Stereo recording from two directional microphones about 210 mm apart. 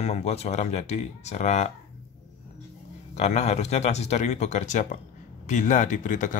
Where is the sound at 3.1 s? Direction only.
30° left (ahead or behind).